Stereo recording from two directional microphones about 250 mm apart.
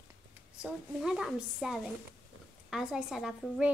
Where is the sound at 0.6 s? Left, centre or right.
Centre.